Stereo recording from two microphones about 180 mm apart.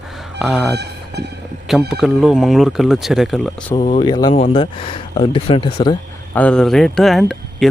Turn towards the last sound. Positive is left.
turn(degrees=0)  # may be behind; listen again after turning